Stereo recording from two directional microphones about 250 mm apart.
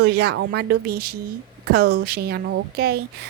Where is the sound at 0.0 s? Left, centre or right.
Right.